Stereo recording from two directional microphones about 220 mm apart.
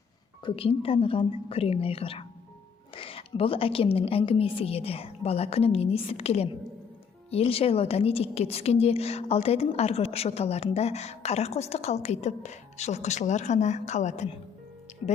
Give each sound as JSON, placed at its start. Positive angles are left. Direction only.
{"t": 0.4, "sound": "a woman's voice", "side_deg": 25}